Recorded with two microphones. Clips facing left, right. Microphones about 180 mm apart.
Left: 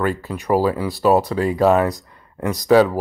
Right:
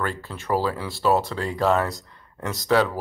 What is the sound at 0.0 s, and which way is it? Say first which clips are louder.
Speech: left 7 dB; 15° left (ahead or behind).